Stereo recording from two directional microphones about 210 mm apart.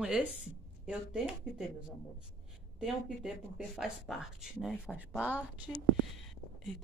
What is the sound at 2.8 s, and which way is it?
A woman's voice, centre (ahead or behind).